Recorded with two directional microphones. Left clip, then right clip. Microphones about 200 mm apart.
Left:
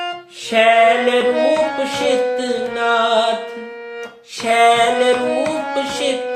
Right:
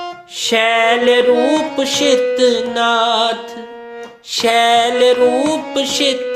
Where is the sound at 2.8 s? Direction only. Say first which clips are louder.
Right 1 dB; 55° right (ahead or behind).